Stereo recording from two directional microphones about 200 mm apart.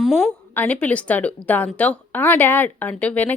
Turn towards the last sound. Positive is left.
turn(degrees=5)  # may be behind; listen again after turning